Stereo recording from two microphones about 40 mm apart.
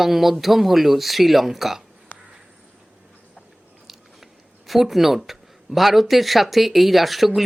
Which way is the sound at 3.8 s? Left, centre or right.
Centre.